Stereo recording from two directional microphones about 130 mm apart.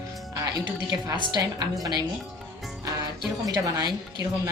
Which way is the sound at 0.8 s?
30° right (ahead or behind).